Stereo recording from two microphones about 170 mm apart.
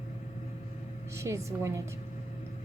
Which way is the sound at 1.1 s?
15° right (ahead or behind).